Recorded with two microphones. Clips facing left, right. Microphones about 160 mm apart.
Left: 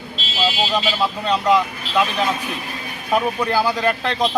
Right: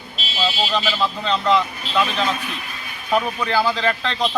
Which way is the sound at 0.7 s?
15° left (ahead or behind).